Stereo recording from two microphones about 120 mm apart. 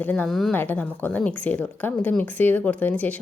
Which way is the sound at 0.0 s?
15° left (ahead or behind).